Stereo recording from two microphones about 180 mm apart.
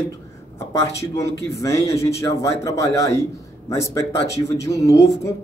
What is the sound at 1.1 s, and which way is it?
A man's voice, 15° left (ahead or behind).